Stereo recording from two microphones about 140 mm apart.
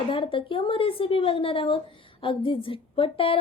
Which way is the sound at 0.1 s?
40° left (ahead or behind).